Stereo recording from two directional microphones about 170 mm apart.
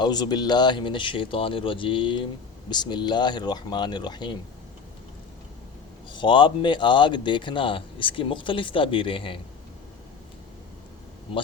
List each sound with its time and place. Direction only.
0.0 s speech: 25° left (ahead or behind)
6.1 s speech: 25° left (ahead or behind)